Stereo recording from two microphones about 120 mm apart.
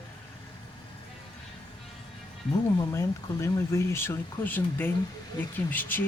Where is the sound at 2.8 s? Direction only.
25° left (ahead or behind).